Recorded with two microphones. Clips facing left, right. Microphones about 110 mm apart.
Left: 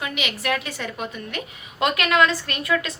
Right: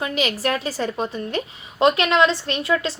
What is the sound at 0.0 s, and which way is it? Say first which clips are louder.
A woman's voice: right 5 dB; 35° right (ahead or behind).